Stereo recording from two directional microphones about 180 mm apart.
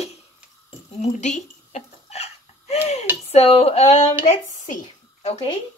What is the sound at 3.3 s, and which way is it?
A woman's voice, 35° left (ahead or behind).